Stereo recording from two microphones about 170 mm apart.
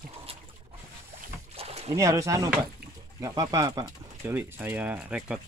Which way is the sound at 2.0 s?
20° right (ahead or behind).